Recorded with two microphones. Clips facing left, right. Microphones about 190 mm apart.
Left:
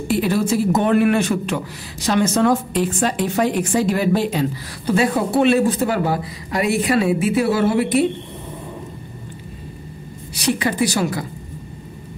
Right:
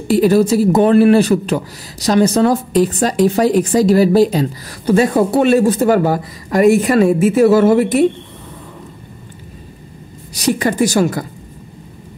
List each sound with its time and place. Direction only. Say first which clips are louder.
0.1 s a man's voice: right 7 dB; 40° right (ahead or behind)
10.3 s a woman's voice: right 5 dB; 45° right (ahead or behind)